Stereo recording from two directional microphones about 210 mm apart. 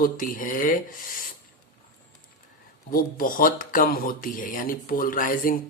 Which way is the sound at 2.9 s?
40° left (ahead or behind).